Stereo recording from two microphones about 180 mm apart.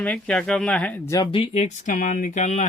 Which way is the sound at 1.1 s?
25° left (ahead or behind).